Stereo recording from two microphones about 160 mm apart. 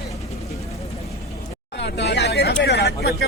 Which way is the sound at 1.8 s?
90° left.